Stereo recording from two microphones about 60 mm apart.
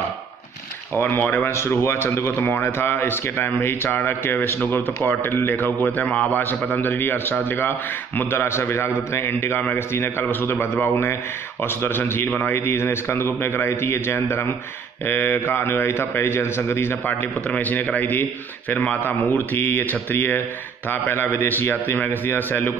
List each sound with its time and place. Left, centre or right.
1.0 s speech: left
1.3 s a man's voice: left
6.7 s a man's voice: left